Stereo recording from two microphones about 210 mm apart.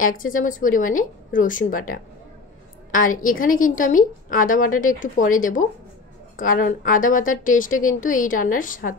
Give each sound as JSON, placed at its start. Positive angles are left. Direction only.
{"t": 0.0, "sound": "a woman's voice", "side_deg": 40}